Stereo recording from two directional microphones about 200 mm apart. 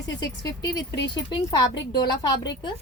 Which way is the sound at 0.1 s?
20° left (ahead or behind).